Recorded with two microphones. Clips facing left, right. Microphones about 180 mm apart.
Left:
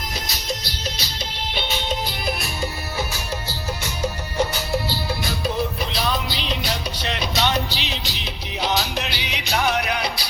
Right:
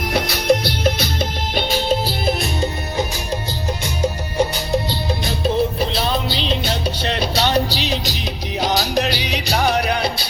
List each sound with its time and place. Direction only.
0.0 s music: 65° right (ahead or behind)
1.7 s music: 35° right (ahead or behind)